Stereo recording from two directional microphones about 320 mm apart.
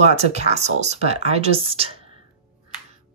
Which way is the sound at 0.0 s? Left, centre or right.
Right.